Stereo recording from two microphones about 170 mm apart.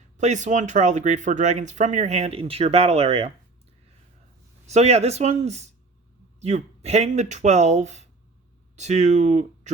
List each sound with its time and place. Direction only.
0.2 s speech: 45° right (ahead or behind)
4.6 s speech: 40° right (ahead or behind)